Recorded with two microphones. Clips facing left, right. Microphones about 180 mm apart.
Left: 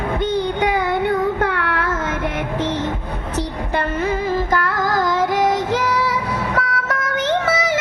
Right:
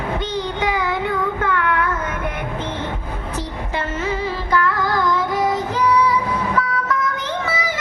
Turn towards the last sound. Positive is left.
turn(degrees=90)